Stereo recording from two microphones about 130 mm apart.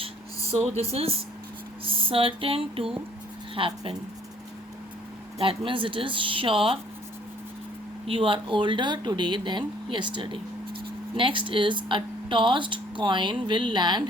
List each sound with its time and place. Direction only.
0.8 s a sound: 50° right (ahead or behind)
5.4 s speech: 40° right (ahead or behind)
8.0 s speech: 45° right (ahead or behind)